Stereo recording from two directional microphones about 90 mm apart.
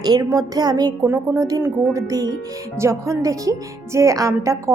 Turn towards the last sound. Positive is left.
turn(degrees=-35)  # may be behind; listen again after turning